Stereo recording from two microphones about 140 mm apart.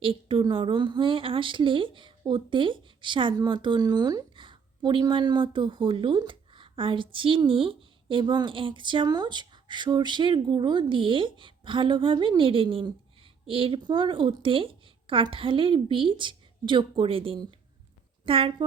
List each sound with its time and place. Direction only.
0.0 s a woman's voice: 40° right (ahead or behind)